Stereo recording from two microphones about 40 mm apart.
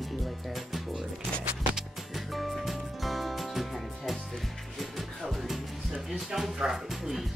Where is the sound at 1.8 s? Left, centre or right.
Centre.